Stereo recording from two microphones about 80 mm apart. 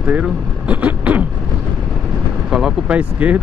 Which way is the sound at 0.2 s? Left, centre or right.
Centre.